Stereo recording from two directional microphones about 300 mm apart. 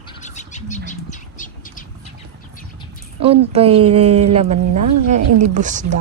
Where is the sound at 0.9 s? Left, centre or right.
Left.